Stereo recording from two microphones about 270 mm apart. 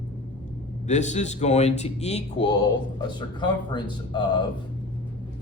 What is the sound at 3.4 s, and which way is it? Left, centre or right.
Speech, centre.